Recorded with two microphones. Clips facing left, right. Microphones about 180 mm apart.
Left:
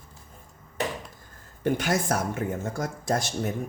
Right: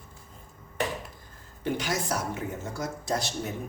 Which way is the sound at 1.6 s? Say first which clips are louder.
Left 4 dB; 50° left (ahead or behind).